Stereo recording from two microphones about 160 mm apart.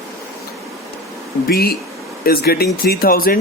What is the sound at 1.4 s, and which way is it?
Speech, 75° left (ahead or behind).